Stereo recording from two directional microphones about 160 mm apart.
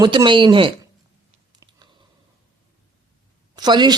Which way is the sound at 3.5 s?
25° right (ahead or behind).